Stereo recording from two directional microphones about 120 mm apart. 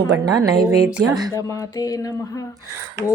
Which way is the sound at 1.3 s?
25° left (ahead or behind).